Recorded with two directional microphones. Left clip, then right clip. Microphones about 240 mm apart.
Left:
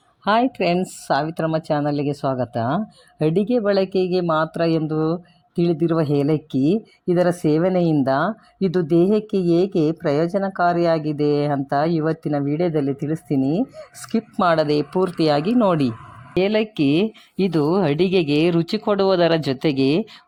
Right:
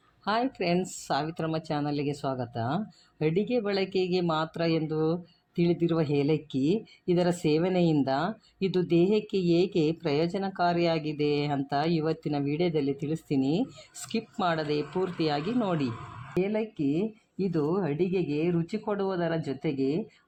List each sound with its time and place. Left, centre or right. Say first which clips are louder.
0.3 s speech: left 9 dB; left